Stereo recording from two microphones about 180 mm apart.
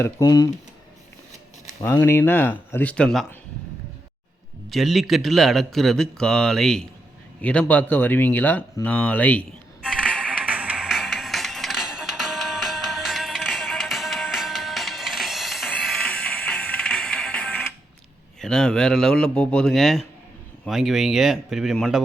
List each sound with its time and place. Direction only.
0.0 s speech: 20° left (ahead or behind)
1.8 s speech: 15° left (ahead or behind)
4.7 s a man's voice: centre (ahead or behind)
10.2 s music: 10° right (ahead or behind)
18.3 s a man's voice: 5° left (ahead or behind)